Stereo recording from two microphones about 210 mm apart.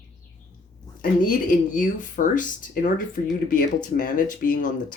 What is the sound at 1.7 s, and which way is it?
Speech, 40° left (ahead or behind).